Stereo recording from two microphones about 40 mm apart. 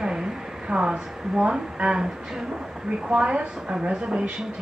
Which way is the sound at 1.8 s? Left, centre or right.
Right.